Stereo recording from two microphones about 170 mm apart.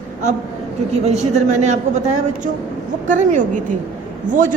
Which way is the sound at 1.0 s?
40° right (ahead or behind).